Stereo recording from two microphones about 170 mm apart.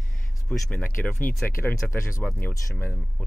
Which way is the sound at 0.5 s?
10° left (ahead or behind).